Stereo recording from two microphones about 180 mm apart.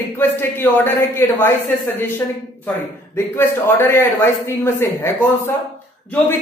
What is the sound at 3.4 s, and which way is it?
Speech, 15° left (ahead or behind).